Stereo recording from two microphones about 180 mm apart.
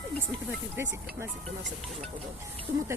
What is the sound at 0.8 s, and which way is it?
Speech, 15° right (ahead or behind).